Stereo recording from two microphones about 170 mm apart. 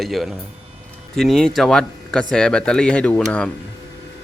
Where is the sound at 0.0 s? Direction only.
Centre (ahead or behind).